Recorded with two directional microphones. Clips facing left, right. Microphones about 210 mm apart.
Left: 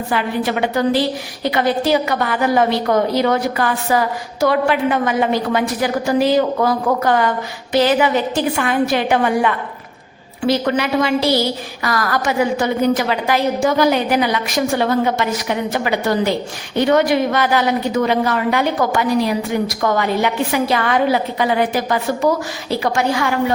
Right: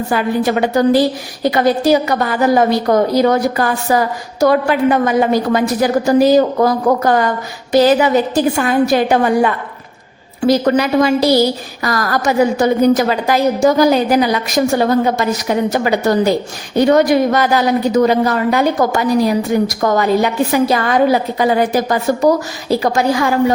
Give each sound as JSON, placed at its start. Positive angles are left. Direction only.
{"t": 0.1, "sound": "a woman's voice", "side_deg": -40}